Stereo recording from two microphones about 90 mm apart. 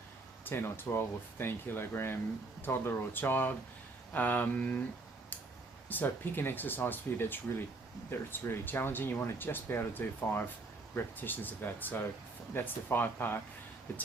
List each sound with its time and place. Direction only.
0.4 s speech: 25° left (ahead or behind)
5.9 s speech: 25° left (ahead or behind)